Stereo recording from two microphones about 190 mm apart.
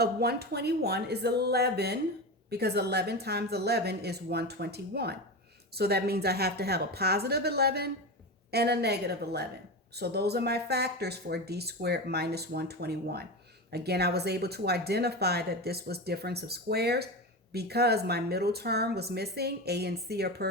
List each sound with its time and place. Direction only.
0.0 s speech: 55° right (ahead or behind)